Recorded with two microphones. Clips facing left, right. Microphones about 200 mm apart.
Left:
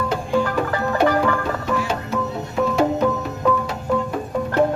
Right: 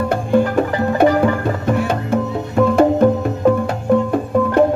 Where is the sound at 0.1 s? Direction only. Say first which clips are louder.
Right 6 dB; 55° right (ahead or behind).